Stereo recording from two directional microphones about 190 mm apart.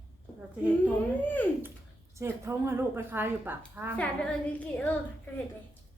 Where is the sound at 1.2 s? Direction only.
10° left (ahead or behind).